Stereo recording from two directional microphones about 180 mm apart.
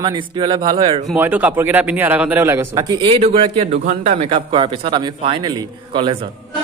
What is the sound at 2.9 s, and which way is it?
A man's voice, 30° right (ahead or behind).